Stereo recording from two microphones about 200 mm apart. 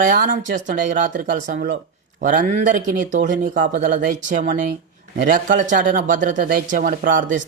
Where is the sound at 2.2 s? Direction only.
40° right (ahead or behind).